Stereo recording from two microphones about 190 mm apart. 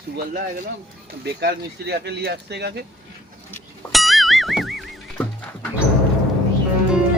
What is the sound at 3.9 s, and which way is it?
Music, centre (ahead or behind).